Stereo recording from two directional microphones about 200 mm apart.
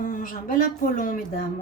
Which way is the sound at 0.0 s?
45° left (ahead or behind).